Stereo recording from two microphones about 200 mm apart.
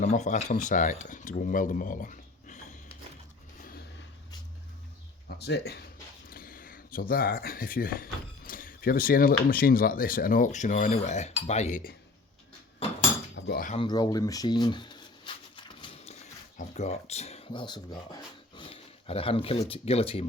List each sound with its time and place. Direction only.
0.0 s speech: 35° left (ahead or behind)
3.6 s vehicle: 45° left (ahead or behind)
5.4 s speech: 55° left (ahead or behind)
13.4 s cutlery: 60° left (ahead or behind)
13.7 s speech: 20° left (ahead or behind)
15.5 s a sound: 25° left (ahead or behind)